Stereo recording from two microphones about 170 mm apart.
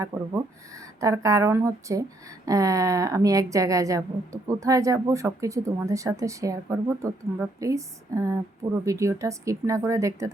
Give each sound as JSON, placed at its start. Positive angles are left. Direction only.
{"t": 0.1, "sound": "a woman's voice", "side_deg": -10}